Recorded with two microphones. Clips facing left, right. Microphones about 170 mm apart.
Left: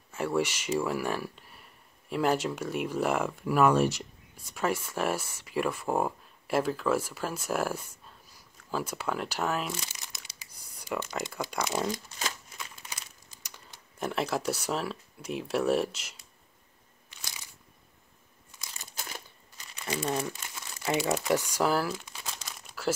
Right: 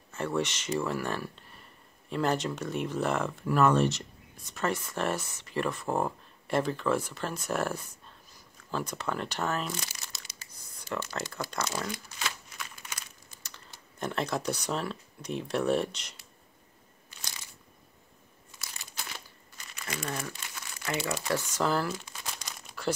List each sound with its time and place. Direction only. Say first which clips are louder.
0.1 s speech: left 2 dB; 10° left (ahead or behind)
9.9 s crumpling: even; 15° left (ahead or behind)
11.4 s speech: left 4 dB; 15° left (ahead or behind)
11.9 s crumpling: left 2 dB; 40° left (ahead or behind)
12.5 s a sound: even; 25° left (ahead or behind)
13.4 s speech: left 1 dB; 10° left (ahead or behind)
18.9 s a sound: left 1 dB; 45° left (ahead or behind)
19.7 s crumpling: left 5 dB; 30° left (ahead or behind)
20.1 s speech: left 6 dB; 20° left (ahead or behind)
20.5 s crumpling: left 4 dB; 20° left (ahead or behind); by 22.9 s 5° left (ahead or behind)